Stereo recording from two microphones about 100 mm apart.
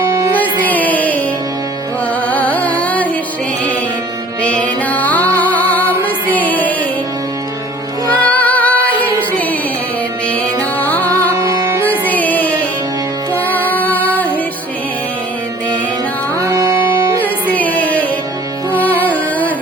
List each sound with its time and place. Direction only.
0.6 s music: 15° left (ahead or behind)
2.2 s music: 15° left (ahead or behind)
4.4 s music: 15° left (ahead or behind)
8.1 s music: 15° left (ahead or behind)
10.8 s music: 15° left (ahead or behind)
11.3 s music: 35° right (ahead or behind)
11.8 s music: 15° left (ahead or behind)
16.4 s music: 35° right (ahead or behind)
17.2 s music: 15° left (ahead or behind)